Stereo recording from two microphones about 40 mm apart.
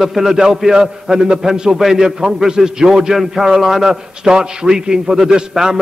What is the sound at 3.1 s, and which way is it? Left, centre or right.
A man's voice, centre.